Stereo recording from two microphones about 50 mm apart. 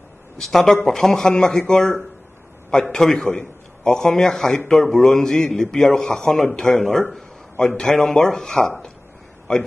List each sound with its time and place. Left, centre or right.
0.4 s a man's voice: centre